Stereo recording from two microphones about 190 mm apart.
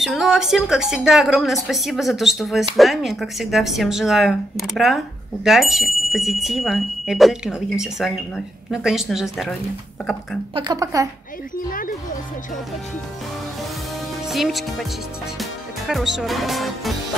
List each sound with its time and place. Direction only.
0.0 s a woman's voice: centre (ahead or behind)
10.5 s speech: 20° right (ahead or behind)
11.5 s speech: 45° left (ahead or behind)
14.2 s a woman's voice: centre (ahead or behind)
15.9 s a woman's voice: centre (ahead or behind)